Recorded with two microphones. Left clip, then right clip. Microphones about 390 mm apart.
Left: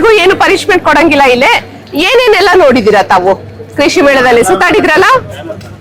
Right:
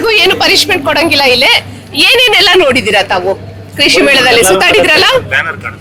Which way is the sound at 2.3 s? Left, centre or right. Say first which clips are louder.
Left 2 dB; left.